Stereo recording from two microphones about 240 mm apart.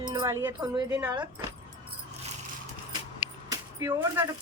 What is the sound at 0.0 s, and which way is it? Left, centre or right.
Speech, centre.